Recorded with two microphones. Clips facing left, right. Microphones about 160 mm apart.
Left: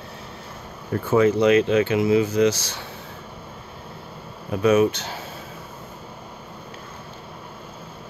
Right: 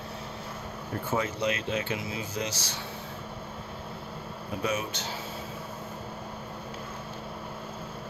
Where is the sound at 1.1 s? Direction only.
90° left.